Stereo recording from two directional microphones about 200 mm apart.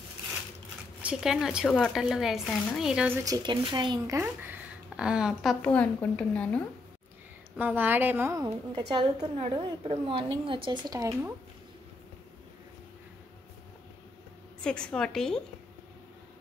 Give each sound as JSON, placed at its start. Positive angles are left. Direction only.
{"t": 1.0, "sound": "speech", "side_deg": -5}
{"t": 3.3, "sound": "a woman's voice", "side_deg": -20}
{"t": 4.2, "sound": "speech", "side_deg": -10}
{"t": 7.5, "sound": "a woman's voice", "side_deg": -10}
{"t": 14.6, "sound": "speech", "side_deg": 5}